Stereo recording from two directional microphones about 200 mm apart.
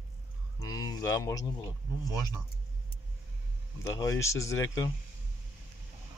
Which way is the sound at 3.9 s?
15° left (ahead or behind).